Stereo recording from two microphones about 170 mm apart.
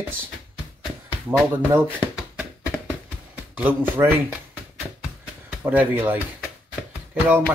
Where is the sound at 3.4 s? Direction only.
10° right (ahead or behind).